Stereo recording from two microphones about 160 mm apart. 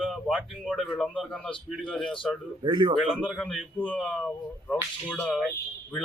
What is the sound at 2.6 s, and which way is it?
Speech, 30° right (ahead or behind).